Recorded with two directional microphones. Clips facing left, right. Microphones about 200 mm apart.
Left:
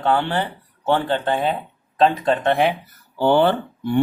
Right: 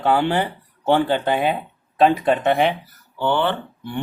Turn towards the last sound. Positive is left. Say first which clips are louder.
# left 5 dB
turn(degrees=40)  # may be behind; listen again after turning